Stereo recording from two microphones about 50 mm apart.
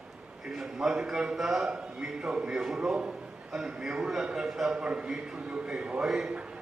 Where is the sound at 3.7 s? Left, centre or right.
Centre.